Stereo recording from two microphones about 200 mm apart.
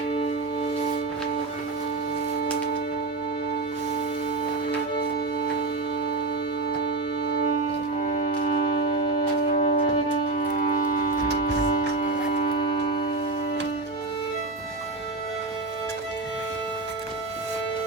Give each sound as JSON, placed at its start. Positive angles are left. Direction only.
{"t": 0.1, "sound": "music", "side_deg": 30}
{"t": 4.9, "sound": "music", "side_deg": 50}
{"t": 6.7, "sound": "music", "side_deg": 55}
{"t": 8.0, "sound": "music", "side_deg": 40}
{"t": 9.5, "sound": "music", "side_deg": 40}